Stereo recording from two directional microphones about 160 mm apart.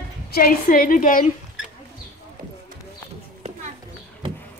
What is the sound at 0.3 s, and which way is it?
A woman's voice, 65° left (ahead or behind).